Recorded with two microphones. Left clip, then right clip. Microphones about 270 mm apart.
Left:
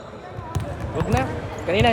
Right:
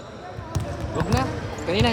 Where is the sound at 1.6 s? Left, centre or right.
Centre.